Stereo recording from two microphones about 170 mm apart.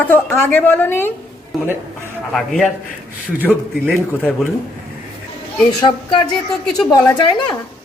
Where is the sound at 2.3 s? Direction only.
Centre (ahead or behind).